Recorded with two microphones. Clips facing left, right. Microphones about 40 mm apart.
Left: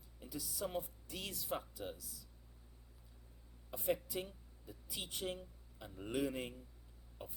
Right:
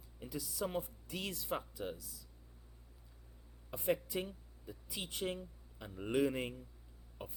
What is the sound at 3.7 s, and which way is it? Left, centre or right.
Speech, right.